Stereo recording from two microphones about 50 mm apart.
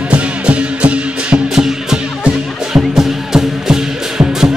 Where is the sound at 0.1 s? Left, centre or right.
Right.